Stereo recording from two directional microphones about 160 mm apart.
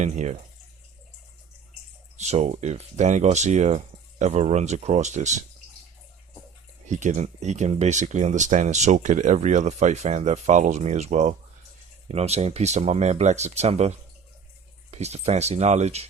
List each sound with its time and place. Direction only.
0.0 s speech: 45° right (ahead or behind)
2.1 s speech: 45° right (ahead or behind)
6.8 s speech: 50° right (ahead or behind)